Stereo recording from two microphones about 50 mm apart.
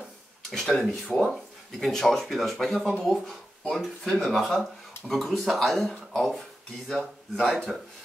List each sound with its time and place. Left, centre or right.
0.5 s speech: centre